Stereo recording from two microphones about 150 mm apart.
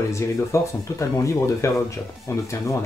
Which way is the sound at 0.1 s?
20° left (ahead or behind).